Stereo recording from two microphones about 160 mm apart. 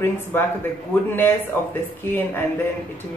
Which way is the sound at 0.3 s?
15° left (ahead or behind).